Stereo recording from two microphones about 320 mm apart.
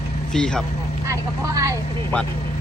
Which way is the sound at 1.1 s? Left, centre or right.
Centre.